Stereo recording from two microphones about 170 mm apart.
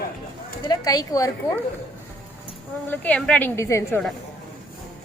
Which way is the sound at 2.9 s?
10° left (ahead or behind).